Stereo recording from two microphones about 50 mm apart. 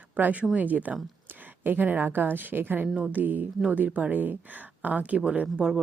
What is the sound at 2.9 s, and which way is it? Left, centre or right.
Speech, right.